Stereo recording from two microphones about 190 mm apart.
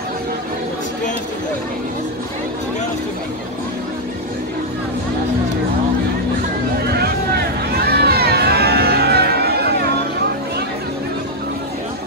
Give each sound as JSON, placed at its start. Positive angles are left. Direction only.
{"t": 7.7, "sound": "music", "side_deg": -55}